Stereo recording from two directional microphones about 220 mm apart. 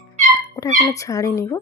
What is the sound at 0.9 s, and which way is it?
Speech, 15° left (ahead or behind).